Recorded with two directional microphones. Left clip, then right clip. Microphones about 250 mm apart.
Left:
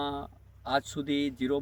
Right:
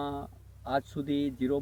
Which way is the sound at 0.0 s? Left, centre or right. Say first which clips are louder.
Left 2 dB; centre.